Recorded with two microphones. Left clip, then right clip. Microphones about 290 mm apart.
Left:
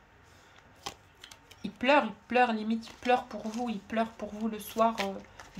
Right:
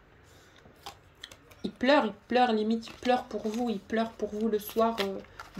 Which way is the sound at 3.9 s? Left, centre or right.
Left.